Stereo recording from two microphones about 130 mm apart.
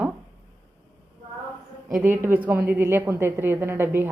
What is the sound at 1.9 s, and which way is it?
A woman's voice, 20° right (ahead or behind).